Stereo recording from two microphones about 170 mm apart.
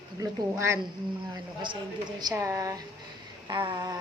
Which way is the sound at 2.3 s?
20° right (ahead or behind).